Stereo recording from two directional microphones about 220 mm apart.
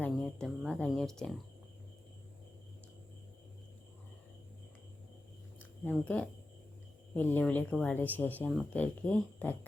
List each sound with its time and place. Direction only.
0.0 s speech: 5° left (ahead or behind)
5.8 s speech: 5° left (ahead or behind)